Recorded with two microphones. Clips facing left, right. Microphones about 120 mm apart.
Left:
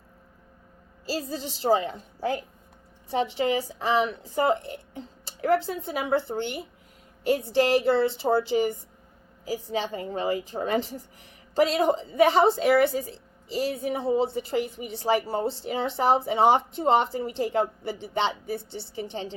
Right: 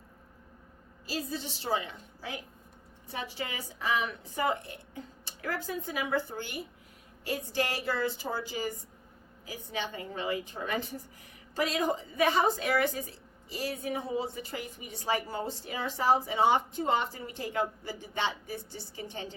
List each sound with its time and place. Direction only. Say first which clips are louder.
1.0 s a woman's voice: left 5 dB; 35° left (ahead or behind)